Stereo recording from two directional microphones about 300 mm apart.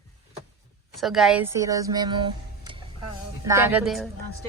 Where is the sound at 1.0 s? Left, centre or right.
Centre.